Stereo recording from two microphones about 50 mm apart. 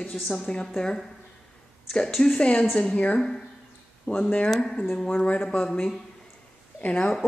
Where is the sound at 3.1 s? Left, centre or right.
Centre.